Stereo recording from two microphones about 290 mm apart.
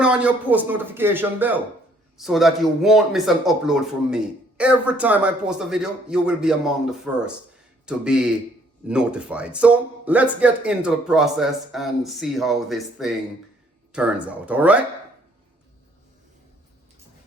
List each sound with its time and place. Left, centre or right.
0.0 s speech: centre